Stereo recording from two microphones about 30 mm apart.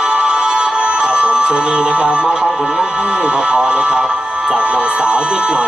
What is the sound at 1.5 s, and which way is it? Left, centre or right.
Speech, right.